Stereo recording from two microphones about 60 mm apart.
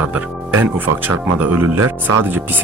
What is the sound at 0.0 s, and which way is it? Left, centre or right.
Speech, right.